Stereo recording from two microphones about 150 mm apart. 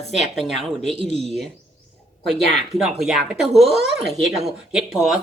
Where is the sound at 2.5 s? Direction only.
Centre (ahead or behind).